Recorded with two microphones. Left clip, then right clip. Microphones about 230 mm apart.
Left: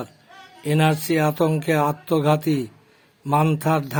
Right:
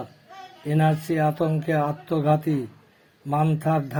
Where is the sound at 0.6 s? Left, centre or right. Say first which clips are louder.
Left 3 dB; centre.